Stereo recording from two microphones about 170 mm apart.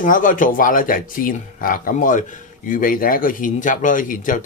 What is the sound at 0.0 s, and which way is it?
Speech, 50° left (ahead or behind).